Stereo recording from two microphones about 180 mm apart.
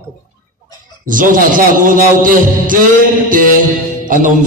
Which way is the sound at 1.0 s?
50° right (ahead or behind).